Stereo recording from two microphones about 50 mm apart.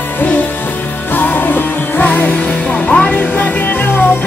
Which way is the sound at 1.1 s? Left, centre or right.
Left.